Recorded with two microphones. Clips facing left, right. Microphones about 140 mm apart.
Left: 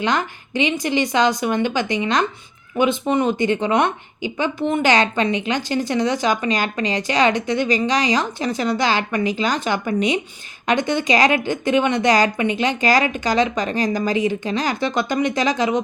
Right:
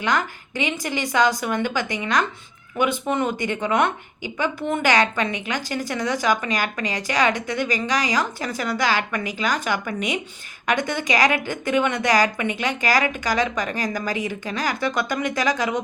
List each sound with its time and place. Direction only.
0.0 s a woman's voice: 20° left (ahead or behind)